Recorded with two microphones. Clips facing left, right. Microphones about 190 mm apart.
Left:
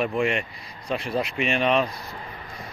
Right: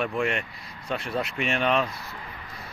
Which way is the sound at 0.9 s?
Centre (ahead or behind).